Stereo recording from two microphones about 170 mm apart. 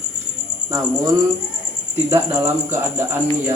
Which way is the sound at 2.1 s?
15° right (ahead or behind).